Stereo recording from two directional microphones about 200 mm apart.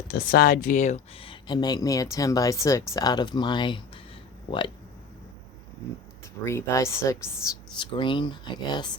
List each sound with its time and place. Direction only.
0.1 s speech: 50° left (ahead or behind); by 4.0 s 25° left (ahead or behind)
6.4 s speech: 15° left (ahead or behind)